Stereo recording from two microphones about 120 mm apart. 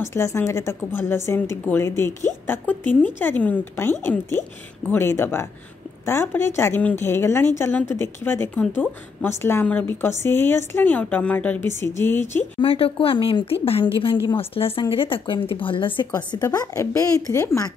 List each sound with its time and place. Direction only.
0.0 s a woman's voice: 25° left (ahead or behind)
12.5 s speech: 50° left (ahead or behind)
16.4 s a woman's voice: 25° left (ahead or behind)